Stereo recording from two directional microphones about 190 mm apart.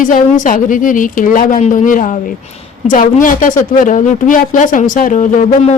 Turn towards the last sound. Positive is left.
turn(degrees=40)  # may be behind; listen again after turning